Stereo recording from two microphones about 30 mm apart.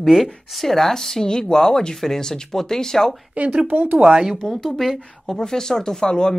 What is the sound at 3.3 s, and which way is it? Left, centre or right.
Speech, right.